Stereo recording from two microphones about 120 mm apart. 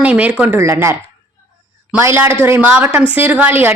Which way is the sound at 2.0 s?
20° right (ahead or behind).